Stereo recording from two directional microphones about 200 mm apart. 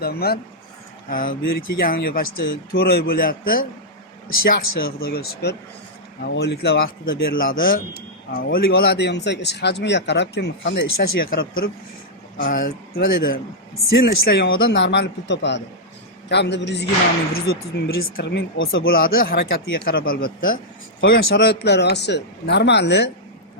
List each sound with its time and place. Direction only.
0.0 s speech: 50° left (ahead or behind); by 18.9 s 75° left (ahead or behind)
18.9 s speech: 45° left (ahead or behind)
21.0 s speech: 55° left (ahead or behind)